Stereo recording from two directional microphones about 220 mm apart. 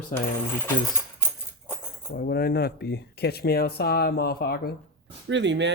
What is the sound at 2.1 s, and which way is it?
Speech, 45° left (ahead or behind).